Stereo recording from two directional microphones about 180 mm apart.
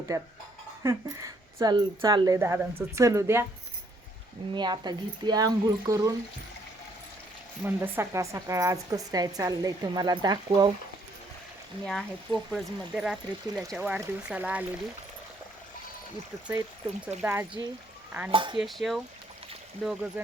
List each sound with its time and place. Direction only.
0.1 s a woman's voice: 15° right (ahead or behind)
4.5 s speech: 25° right (ahead or behind)
7.6 s speech: 10° right (ahead or behind)
11.9 s a woman's voice: centre (ahead or behind)
17.1 s speech: 40° right (ahead or behind)
17.6 s speech: 20° right (ahead or behind)
18.6 s speech: centre (ahead or behind)